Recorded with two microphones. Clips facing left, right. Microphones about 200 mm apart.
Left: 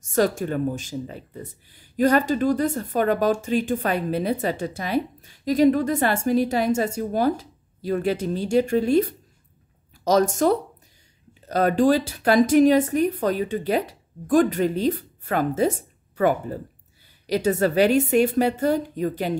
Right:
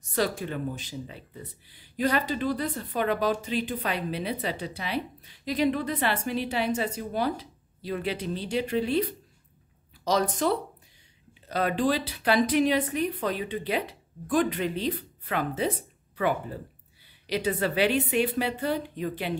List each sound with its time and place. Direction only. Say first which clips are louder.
0.0 s speech: left 7 dB; 45° left (ahead or behind)